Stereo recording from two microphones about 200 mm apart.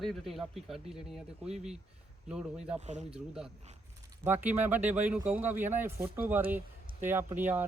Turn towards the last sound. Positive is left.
turn(degrees=-10)  # may be behind; listen again after turning